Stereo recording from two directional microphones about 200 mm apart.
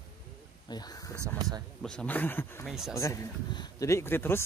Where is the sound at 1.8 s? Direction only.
5° left (ahead or behind).